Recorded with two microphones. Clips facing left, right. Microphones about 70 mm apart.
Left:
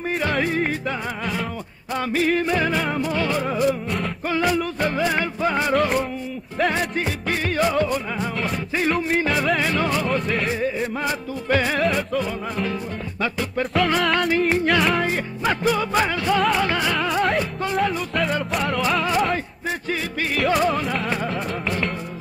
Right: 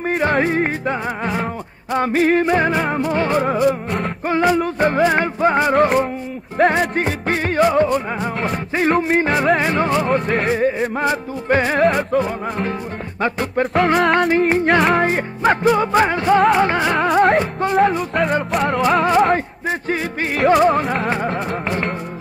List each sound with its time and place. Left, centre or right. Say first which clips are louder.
0.0 s music: right 5 dB; right
3.6 s music: right 4 dB; right
4.3 s music: right 5 dB; right
6.6 s music: right 6 dB; right
11.8 s music: right 6 dB; right